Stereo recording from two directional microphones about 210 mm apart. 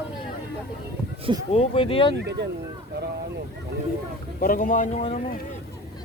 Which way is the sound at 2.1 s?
55° right (ahead or behind).